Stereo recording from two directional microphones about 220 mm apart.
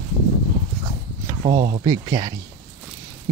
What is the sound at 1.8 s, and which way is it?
Speech, 15° right (ahead or behind).